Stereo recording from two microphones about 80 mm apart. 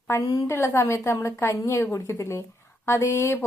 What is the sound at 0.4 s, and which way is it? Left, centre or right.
Speech, left.